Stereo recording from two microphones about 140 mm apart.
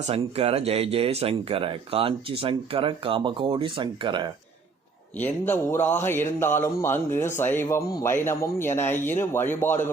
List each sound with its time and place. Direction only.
0.1 s speech: 45° right (ahead or behind)
5.2 s mantra: 15° left (ahead or behind)